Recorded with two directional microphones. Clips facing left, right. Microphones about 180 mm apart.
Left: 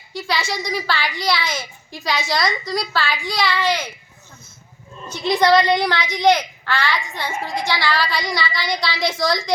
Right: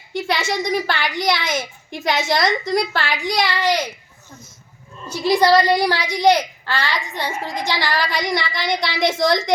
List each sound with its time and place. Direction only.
0.1 s speech: 25° right (ahead or behind)
0.7 s a woman's voice: 50° right (ahead or behind)
1.2 s a woman's voice: 20° right (ahead or behind)
2.1 s a woman's voice: 50° right (ahead or behind)
3.2 s a child's voice: 20° right (ahead or behind)
5.0 s a child's voice: 10° right (ahead or behind)